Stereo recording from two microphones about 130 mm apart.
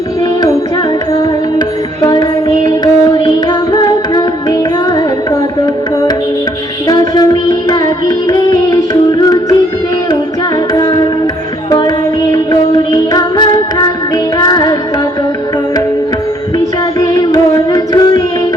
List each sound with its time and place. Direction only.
2.6 s music: 35° left (ahead or behind)
11.7 s music: 30° left (ahead or behind)
17.2 s carnatic music: 30° left (ahead or behind)